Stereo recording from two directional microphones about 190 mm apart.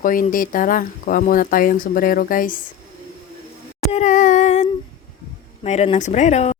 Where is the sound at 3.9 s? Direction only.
40° left (ahead or behind).